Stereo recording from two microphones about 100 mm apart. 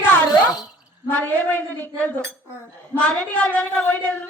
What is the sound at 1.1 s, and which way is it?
Speech, 15° left (ahead or behind).